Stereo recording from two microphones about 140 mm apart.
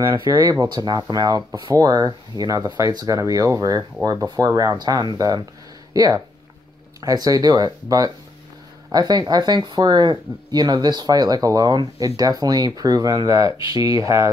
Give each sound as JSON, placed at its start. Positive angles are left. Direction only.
{"t": 0.0, "sound": "speech", "side_deg": -25}